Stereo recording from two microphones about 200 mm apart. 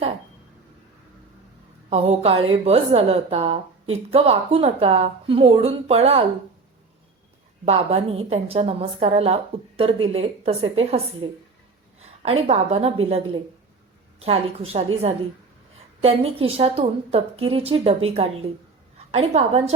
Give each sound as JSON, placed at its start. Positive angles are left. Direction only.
{"t": 1.9, "sound": "a woman's voice", "side_deg": -30}
{"t": 7.6, "sound": "a woman's voice", "side_deg": -30}
{"t": 16.0, "sound": "a woman's voice", "side_deg": -30}